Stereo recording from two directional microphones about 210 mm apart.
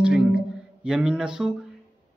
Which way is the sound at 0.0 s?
5° right (ahead or behind).